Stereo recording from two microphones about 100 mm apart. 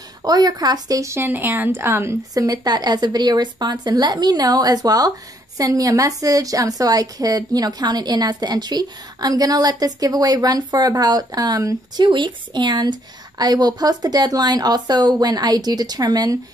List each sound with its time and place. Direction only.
0.2 s a woman's voice: 40° right (ahead or behind)
2.3 s a woman's voice: 40° right (ahead or behind)